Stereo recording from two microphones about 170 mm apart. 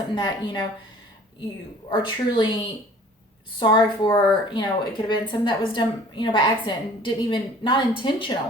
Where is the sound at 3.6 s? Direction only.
25° left (ahead or behind).